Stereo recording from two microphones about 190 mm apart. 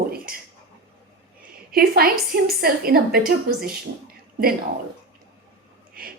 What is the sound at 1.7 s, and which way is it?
A woman's voice, 50° right (ahead or behind).